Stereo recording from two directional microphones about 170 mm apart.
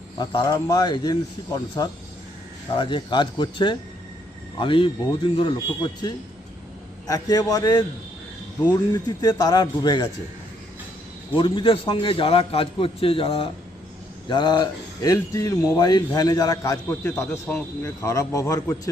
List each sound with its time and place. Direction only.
0.2 s speech: 25° left (ahead or behind)
11.3 s a man's voice: 30° left (ahead or behind)